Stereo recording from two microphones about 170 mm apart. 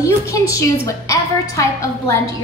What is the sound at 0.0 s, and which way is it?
A woman's voice, 20° left (ahead or behind).